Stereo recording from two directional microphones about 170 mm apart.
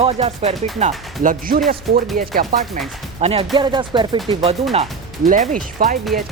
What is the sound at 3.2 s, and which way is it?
Speech, 35° right (ahead or behind).